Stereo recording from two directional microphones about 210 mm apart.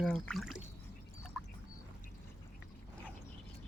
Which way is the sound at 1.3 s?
5° left (ahead or behind).